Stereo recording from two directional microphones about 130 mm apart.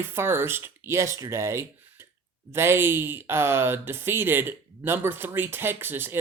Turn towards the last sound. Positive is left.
turn(degrees=-15)  # may be behind; listen again after turning